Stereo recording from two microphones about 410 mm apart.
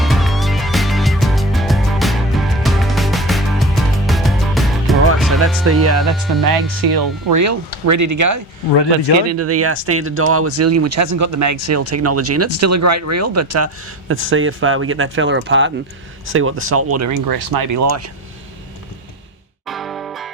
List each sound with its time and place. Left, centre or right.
0.0 s music: centre
5.9 s speech: centre
6.4 s speech: right
17.2 s speech: right
19.6 s music: centre